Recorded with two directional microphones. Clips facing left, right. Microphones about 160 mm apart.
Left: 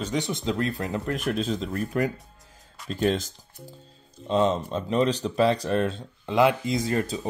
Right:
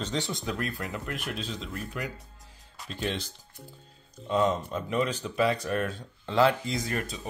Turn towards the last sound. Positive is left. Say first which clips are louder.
# left 6 dB
turn(degrees=25)  # may be behind; listen again after turning